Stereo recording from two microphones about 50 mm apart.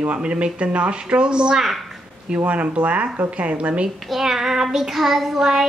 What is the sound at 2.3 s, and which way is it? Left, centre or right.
Speech, right.